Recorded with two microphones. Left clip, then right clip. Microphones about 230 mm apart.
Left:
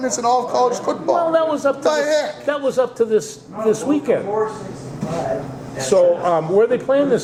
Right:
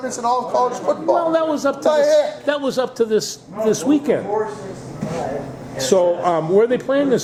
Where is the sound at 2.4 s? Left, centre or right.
Right.